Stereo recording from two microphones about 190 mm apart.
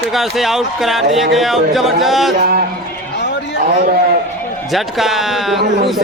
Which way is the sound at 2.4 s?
50° right (ahead or behind).